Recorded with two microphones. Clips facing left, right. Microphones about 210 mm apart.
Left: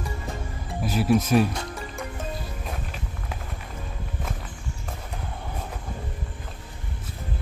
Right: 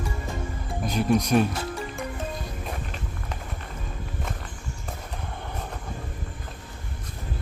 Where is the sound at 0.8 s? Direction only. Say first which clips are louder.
Left 1 dB; 5° left (ahead or behind).